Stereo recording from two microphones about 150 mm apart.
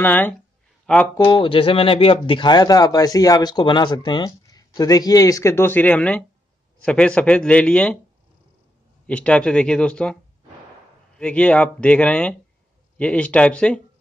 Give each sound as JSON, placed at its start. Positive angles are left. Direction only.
{"t": 0.0, "sound": "speech", "side_deg": 15}
{"t": 1.1, "sound": "speech", "side_deg": 30}
{"t": 9.0, "sound": "speech", "side_deg": 10}
{"t": 11.1, "sound": "speech", "side_deg": 10}